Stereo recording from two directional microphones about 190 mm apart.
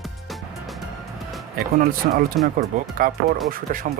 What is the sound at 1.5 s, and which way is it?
Speech, 50° right (ahead or behind).